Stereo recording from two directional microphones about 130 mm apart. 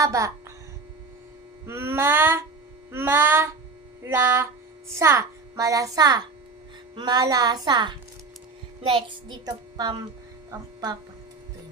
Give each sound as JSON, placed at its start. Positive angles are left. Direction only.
{"t": 0.0, "sound": "speech", "side_deg": -25}
{"t": 1.6, "sound": "a child's voice", "side_deg": -20}